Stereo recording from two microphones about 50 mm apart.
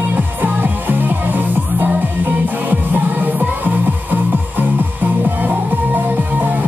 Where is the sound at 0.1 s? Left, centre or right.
Right.